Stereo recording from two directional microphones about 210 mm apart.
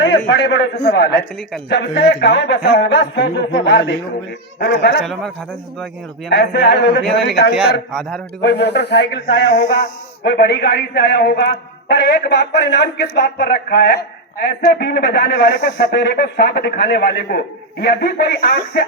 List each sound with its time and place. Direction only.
0.3 s a man's voice: 55° left (ahead or behind)
6.3 s a man's voice: 55° left (ahead or behind)
9.6 s a sound: 30° left (ahead or behind)
10.2 s a man's voice: 50° left (ahead or behind)